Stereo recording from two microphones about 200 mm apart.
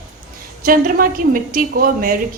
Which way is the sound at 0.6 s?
45° right (ahead or behind).